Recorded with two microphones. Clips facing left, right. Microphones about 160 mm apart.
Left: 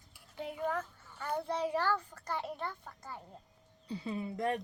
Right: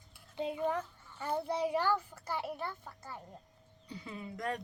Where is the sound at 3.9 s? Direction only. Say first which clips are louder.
Left 6 dB; 25° left (ahead or behind).